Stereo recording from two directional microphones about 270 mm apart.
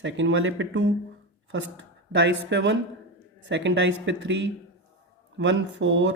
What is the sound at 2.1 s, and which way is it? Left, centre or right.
A woman's voice, right.